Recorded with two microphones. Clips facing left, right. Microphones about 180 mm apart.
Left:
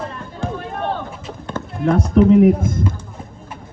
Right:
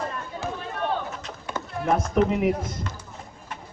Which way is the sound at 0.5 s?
50° left (ahead or behind).